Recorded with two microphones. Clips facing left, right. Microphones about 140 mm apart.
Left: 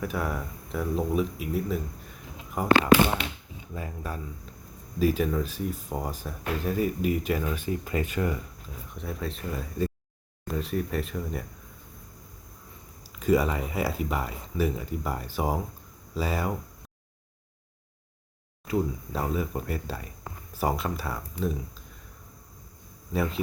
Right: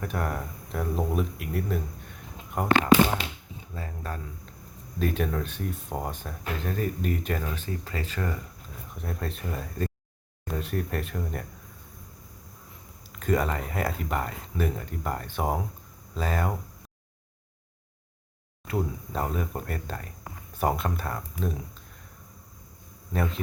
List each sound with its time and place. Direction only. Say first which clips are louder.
0.0 s speech: left 1 dB; 5° left (ahead or behind)
3.8 s speech: left 1 dB; 10° left (ahead or behind)
9.0 s speech: left 1 dB; centre (ahead or behind)
13.1 s speech: left 3 dB; 5° left (ahead or behind)
18.7 s speech: left 2 dB; centre (ahead or behind)